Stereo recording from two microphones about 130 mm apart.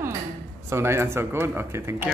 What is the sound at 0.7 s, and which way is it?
Speech, 20° right (ahead or behind).